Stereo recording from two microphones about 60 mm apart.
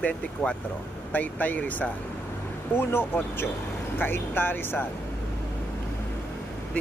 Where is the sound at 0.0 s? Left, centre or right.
Left.